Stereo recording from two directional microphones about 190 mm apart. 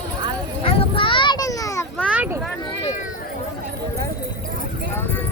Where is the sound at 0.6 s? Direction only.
30° left (ahead or behind).